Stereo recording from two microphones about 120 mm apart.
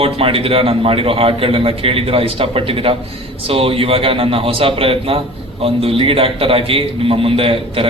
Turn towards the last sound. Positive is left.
turn(degrees=-50)  # may be behind; listen again after turning